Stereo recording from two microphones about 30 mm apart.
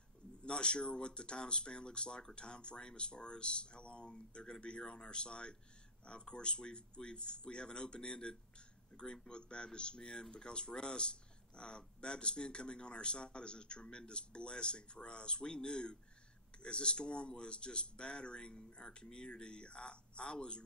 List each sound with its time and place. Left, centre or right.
0.4 s speech: left